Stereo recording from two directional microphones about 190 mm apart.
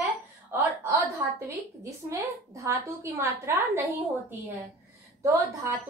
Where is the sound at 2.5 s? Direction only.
15° right (ahead or behind).